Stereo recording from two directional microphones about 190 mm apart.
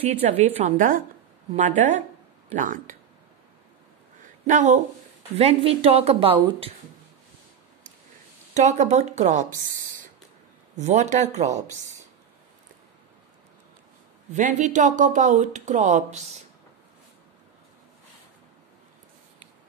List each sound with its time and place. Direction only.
0.0 s speech: 35° right (ahead or behind)
4.5 s speech: 40° right (ahead or behind)
8.5 s speech: 40° right (ahead or behind)
10.8 s speech: 35° right (ahead or behind)
14.3 s speech: 40° right (ahead or behind)